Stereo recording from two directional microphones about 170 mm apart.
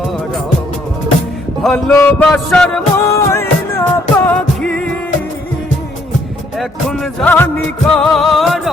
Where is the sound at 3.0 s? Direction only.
15° left (ahead or behind).